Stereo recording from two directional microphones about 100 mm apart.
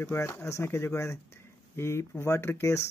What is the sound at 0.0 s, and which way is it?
Speech, 25° left (ahead or behind).